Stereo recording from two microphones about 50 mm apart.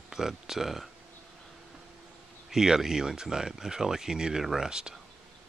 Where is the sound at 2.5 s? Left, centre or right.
Centre.